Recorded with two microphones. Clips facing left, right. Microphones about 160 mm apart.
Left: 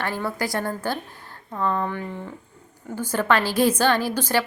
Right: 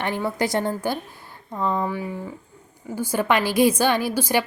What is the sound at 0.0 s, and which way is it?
A woman's voice, 20° right (ahead or behind).